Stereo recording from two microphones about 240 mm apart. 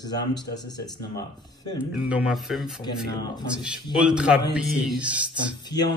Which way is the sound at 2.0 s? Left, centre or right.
Centre.